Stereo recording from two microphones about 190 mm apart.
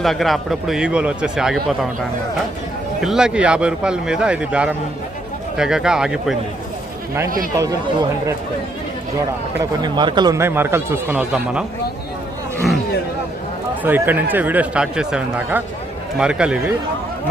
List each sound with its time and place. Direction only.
0.0 s a man's voice: centre (ahead or behind)
3.0 s a man's voice: 5° right (ahead or behind)
9.6 s speech: 20° right (ahead or behind)
13.8 s a man's voice: 10° right (ahead or behind)